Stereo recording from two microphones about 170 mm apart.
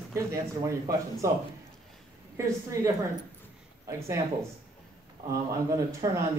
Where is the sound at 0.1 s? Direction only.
20° right (ahead or behind).